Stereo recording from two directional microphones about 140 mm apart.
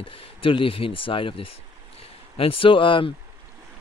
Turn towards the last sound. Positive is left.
turn(degrees=35)  # may be behind; listen again after turning